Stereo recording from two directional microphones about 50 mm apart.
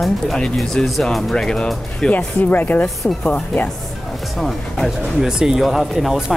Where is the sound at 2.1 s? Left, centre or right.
Left.